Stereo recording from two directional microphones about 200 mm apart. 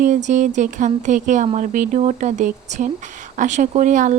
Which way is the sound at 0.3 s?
35° right (ahead or behind).